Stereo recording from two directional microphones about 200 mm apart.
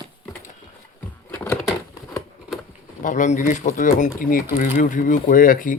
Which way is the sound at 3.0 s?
40° left (ahead or behind).